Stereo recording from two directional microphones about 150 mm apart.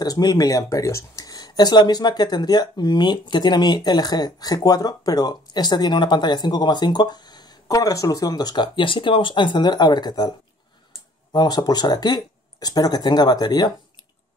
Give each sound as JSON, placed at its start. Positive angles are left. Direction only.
{"t": 0.0, "sound": "speech", "side_deg": 25}
{"t": 11.3, "sound": "speech", "side_deg": 30}